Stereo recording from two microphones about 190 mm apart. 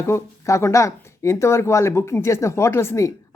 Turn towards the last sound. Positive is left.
turn(degrees=15)  # may be behind; listen again after turning